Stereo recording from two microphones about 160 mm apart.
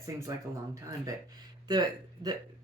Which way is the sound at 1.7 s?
25° right (ahead or behind).